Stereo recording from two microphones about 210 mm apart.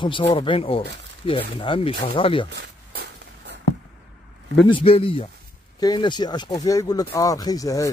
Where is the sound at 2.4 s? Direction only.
50° right (ahead or behind).